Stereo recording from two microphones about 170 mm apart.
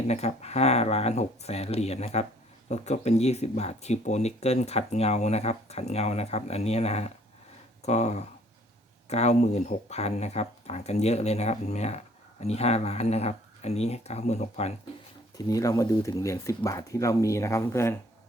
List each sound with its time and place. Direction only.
0.1 s speech: 40° left (ahead or behind)
15.4 s speech: 20° left (ahead or behind)